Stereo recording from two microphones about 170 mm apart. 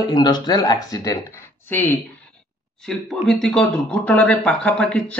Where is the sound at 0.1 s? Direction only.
25° left (ahead or behind).